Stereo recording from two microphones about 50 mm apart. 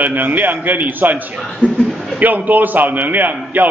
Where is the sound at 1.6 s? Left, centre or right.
Left.